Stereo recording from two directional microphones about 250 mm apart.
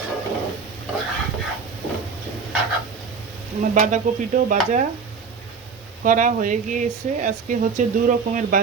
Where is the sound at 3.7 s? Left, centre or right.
Right.